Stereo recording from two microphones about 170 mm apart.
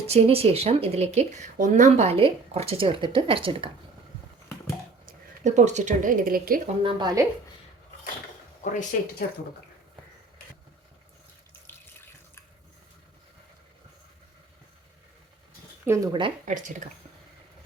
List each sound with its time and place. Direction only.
0.1 s speech: 35° right (ahead or behind)
5.0 s a woman's voice: 45° right (ahead or behind)
6.8 s a woman's voice: 25° right (ahead or behind)
8.6 s speech: 50° left (ahead or behind)
15.9 s a woman's voice: 25° right (ahead or behind)
16.5 s speech: 45° right (ahead or behind)